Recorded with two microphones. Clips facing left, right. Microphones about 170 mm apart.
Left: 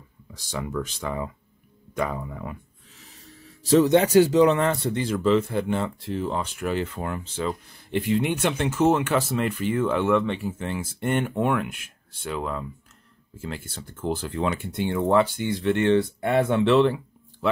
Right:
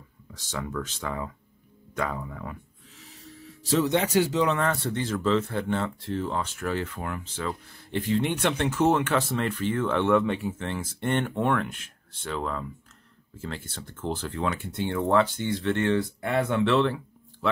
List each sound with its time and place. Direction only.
0.3 s speech: 10° left (ahead or behind)
3.7 s speech: 40° left (ahead or behind)
4.6 s speech: 20° left (ahead or behind); by 10.5 s 5° right (ahead or behind)
10.6 s speech: 10° left (ahead or behind)